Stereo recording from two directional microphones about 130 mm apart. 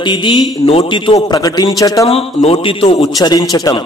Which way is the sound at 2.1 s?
50° left (ahead or behind).